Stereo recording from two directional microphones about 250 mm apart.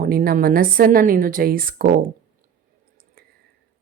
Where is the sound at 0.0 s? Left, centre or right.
Right.